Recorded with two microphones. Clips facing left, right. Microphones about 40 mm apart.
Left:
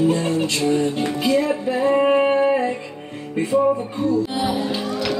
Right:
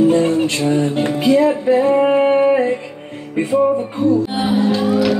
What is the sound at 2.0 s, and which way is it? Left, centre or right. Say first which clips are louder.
Singing: right 3 dB; centre.